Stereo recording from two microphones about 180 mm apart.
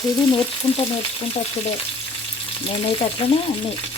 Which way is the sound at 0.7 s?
30° left (ahead or behind).